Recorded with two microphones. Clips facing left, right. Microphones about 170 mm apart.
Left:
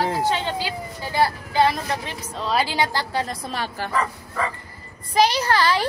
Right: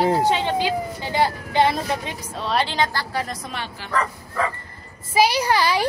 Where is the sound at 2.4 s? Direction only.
5° left (ahead or behind).